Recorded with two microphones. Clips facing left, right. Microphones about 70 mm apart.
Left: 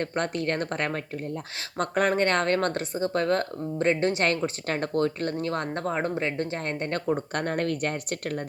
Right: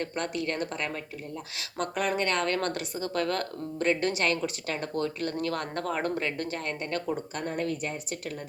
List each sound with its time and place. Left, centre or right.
0.0 s speech: left
5.4 s speech: left
6.7 s speech: left
7.3 s speech: left